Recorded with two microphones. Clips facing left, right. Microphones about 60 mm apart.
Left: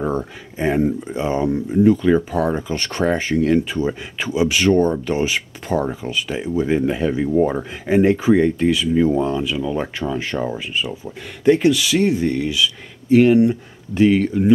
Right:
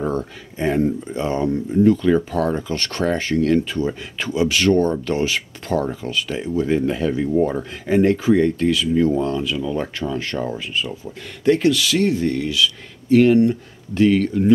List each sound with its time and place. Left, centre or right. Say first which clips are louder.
0.0 s speech: left 1 dB; centre